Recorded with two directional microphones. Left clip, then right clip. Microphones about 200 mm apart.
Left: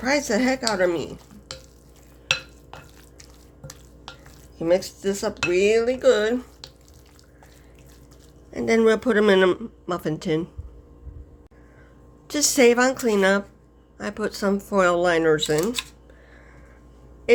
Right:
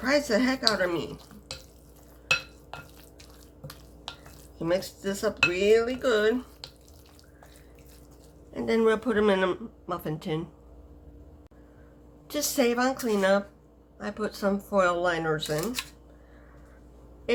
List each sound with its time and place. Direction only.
0.0 s speech: 35° left (ahead or behind)
2.7 s drip: 5° left (ahead or behind)
4.5 s speech: 35° left (ahead or behind)
8.5 s speech: 35° left (ahead or behind)
12.3 s speech: 40° left (ahead or behind)
17.3 s a sound: 40° left (ahead or behind)